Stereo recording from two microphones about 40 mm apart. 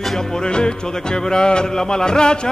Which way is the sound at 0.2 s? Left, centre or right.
Centre.